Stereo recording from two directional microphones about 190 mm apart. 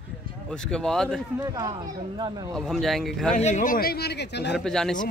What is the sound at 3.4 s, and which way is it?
Speech, 40° left (ahead or behind).